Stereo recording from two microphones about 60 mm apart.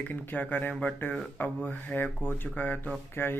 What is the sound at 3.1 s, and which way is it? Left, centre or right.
Speech, left.